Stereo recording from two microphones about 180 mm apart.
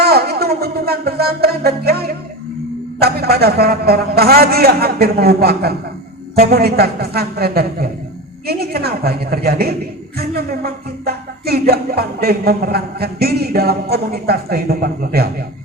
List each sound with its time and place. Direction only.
0.0 s music: 60° right (ahead or behind)
3.0 s a man's voice: 60° right (ahead or behind)